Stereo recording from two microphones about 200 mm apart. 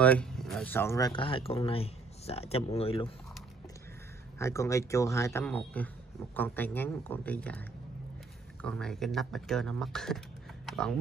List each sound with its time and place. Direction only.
0.0 s speech: 5° left (ahead or behind); by 3.1 s 30° left (ahead or behind)
4.4 s speech: 15° left (ahead or behind)
8.6 s speech: 5° left (ahead or behind)